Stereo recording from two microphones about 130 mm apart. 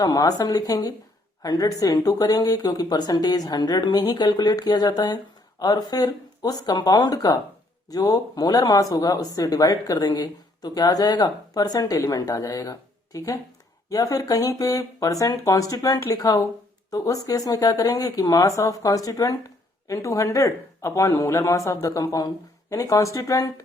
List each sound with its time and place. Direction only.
0.0 s speech: 30° left (ahead or behind)